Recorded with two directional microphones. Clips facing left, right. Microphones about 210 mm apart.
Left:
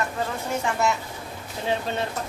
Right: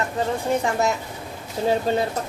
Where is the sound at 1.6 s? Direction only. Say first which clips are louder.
Right 6 dB; 35° right (ahead or behind).